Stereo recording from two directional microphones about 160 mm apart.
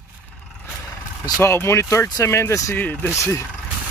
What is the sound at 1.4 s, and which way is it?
Speech, 15° left (ahead or behind).